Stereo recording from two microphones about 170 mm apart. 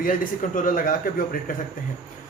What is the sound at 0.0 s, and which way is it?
A man's voice, 50° left (ahead or behind).